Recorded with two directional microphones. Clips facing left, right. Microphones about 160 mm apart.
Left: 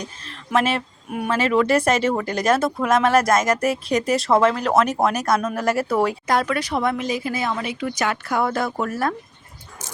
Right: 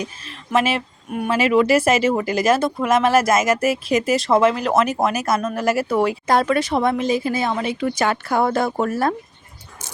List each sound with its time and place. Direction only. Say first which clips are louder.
0.5 s speech: right 1 dB; 5° right (ahead or behind)
6.2 s speech: right 4 dB; 30° right (ahead or behind)